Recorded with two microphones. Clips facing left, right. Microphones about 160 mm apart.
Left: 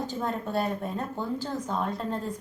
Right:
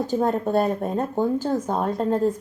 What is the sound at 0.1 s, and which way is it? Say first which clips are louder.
Speech: right 9 dB; 45° right (ahead or behind).